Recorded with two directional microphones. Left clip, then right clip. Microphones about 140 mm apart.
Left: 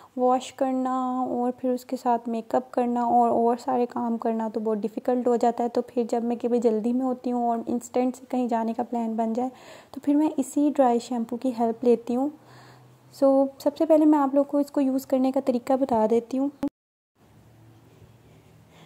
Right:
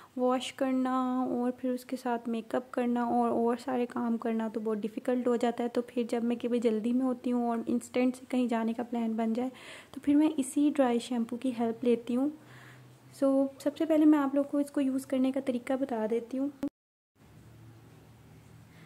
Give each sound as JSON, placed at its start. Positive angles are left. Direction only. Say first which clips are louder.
{"t": 0.2, "sound": "speech", "louder": "left 7 dB", "side_deg": 10}